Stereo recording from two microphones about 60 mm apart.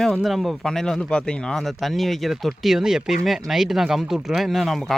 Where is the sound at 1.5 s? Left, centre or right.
Centre.